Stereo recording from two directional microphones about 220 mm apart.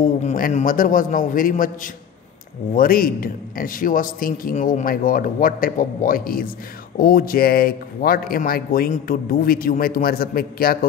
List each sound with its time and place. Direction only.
0.0 s speech: 35° left (ahead or behind)
2.7 s speech: 40° left (ahead or behind)